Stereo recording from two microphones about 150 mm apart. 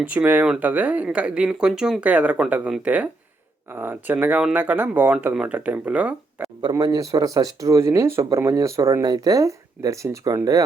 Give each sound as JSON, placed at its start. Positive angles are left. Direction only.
{"t": 0.0, "sound": "speech", "side_deg": -10}
{"t": 6.6, "sound": "speech", "side_deg": -25}